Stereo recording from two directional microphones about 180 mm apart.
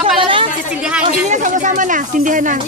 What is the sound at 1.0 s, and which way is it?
Speech, 45° right (ahead or behind).